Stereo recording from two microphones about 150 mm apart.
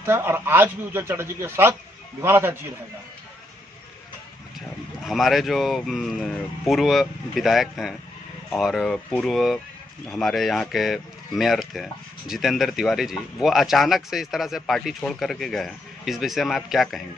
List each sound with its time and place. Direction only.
0.0 s speech: 15° right (ahead or behind)
5.0 s speech: centre (ahead or behind)